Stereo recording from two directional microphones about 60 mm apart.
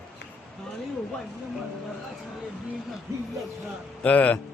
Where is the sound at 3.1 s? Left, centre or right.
Right.